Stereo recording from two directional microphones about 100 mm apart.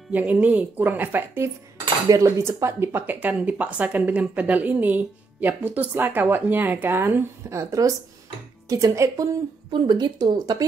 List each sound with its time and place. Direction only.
0.1 s speech: 15° right (ahead or behind); by 9.3 s 30° right (ahead or behind)
9.7 s speech: 50° right (ahead or behind)